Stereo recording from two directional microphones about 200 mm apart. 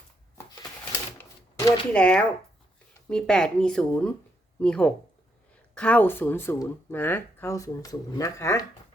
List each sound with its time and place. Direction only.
1.2 s typewriter: 15° left (ahead or behind)
1.9 s speech: 5° left (ahead or behind)